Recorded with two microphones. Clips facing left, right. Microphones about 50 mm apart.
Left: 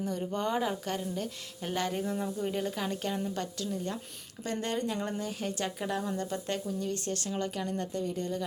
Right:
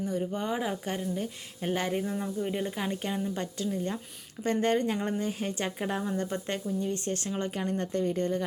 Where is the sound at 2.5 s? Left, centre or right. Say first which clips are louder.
Right 1 dB; right.